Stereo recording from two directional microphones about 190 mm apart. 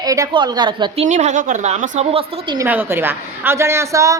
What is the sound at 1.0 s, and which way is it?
A woman's voice, 40° right (ahead or behind).